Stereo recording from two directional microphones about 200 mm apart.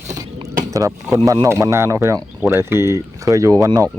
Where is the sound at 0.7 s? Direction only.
15° right (ahead or behind).